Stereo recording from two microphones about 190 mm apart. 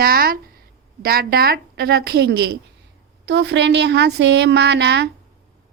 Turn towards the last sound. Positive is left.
turn(degrees=-65)  # may be behind; listen again after turning